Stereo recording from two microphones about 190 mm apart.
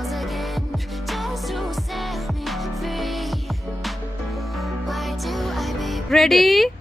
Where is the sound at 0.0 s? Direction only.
Centre (ahead or behind).